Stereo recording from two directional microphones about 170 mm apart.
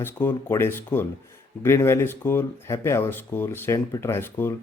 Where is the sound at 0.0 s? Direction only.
15° left (ahead or behind).